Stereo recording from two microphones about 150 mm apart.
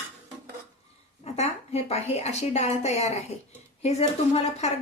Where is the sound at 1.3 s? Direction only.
45° left (ahead or behind).